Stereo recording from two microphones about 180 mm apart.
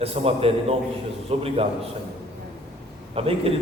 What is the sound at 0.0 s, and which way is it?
A man's voice, 35° right (ahead or behind).